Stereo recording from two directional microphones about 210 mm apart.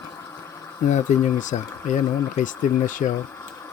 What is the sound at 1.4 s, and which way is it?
Speech, 35° left (ahead or behind).